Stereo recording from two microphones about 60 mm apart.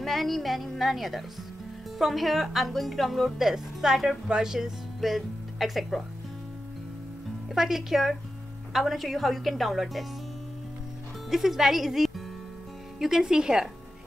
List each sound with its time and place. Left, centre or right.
0.0 s speech: centre
7.5 s speech: centre
11.2 s speech: centre